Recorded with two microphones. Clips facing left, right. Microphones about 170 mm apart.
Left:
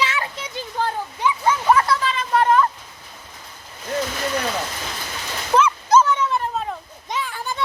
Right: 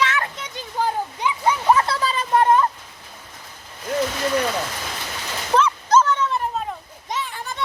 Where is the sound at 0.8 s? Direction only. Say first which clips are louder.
Even; 15° right (ahead or behind).